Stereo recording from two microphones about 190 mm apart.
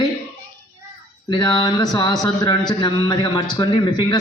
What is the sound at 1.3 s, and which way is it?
Speech, 20° left (ahead or behind).